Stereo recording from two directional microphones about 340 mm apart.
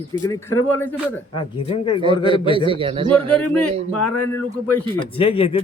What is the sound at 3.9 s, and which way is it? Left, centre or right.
Speech, left.